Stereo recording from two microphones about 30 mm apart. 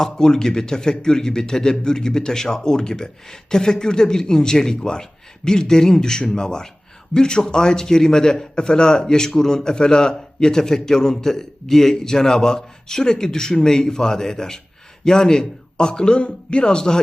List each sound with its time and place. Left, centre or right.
0.0 s a man's voice: left